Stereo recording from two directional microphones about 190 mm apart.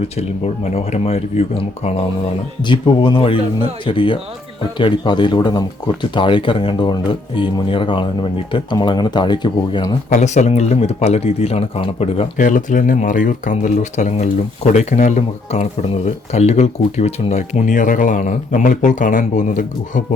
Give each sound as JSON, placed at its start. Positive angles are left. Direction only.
{"t": 0.2, "sound": "speech", "side_deg": 35}
{"t": 2.6, "sound": "speech", "side_deg": 25}
{"t": 10.1, "sound": "speech", "side_deg": 35}